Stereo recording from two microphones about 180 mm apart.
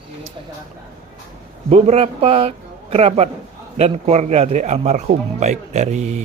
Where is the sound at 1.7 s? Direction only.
35° right (ahead or behind).